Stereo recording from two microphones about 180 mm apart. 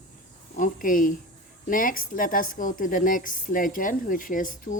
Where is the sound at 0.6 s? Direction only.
50° left (ahead or behind).